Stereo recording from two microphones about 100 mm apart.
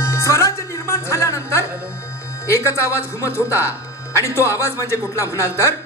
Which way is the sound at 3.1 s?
25° left (ahead or behind).